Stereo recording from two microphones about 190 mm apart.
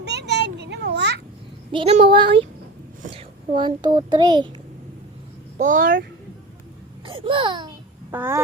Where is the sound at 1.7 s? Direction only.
35° right (ahead or behind).